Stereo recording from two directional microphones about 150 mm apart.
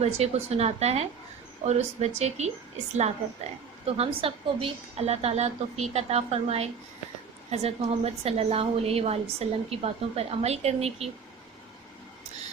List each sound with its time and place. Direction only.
0.0 s a woman's voice: 45° right (ahead or behind)
3.8 s a woman's voice: 40° right (ahead or behind)